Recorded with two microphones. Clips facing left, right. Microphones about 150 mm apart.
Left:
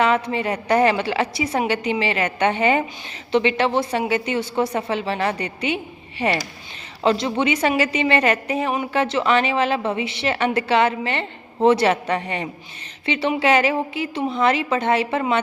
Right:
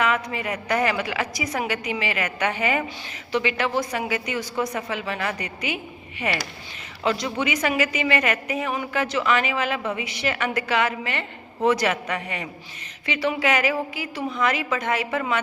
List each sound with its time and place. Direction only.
0.0 s a woman's voice: 30° left (ahead or behind)